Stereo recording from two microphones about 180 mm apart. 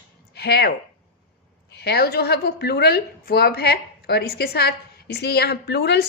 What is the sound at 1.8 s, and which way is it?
Speech, 60° left (ahead or behind).